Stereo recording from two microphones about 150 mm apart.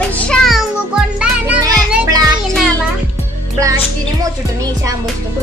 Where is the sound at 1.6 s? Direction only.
25° right (ahead or behind).